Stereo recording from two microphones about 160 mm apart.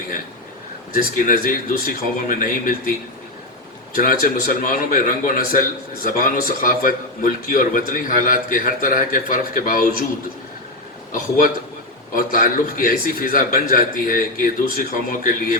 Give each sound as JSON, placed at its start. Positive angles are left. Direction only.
{"t": 0.9, "sound": "a man's voice", "side_deg": 55}
{"t": 3.9, "sound": "a man's voice", "side_deg": 60}
{"t": 11.1, "sound": "a man's voice", "side_deg": 55}